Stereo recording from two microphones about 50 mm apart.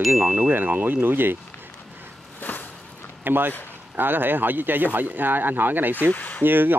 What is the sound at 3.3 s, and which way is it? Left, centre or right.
Speech, right.